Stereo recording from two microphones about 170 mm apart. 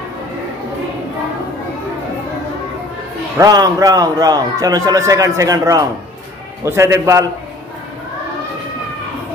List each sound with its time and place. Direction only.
3.3 s a man's voice: 20° right (ahead or behind)